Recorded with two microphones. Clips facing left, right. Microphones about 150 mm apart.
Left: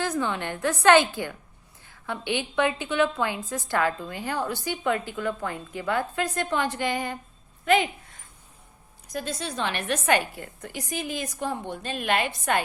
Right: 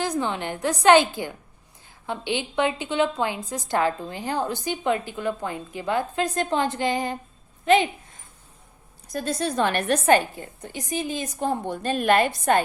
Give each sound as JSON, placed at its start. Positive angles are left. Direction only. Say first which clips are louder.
{"t": 0.0, "sound": "a woman's voice", "louder": "right 1 dB", "side_deg": -20}
{"t": 9.1, "sound": "a woman's voice", "louder": "right 6 dB", "side_deg": -40}
{"t": 10.2, "sound": "a woman's voice", "louder": "right 3 dB", "side_deg": -25}
{"t": 11.3, "sound": "a woman's voice", "louder": "right 4 dB", "side_deg": -45}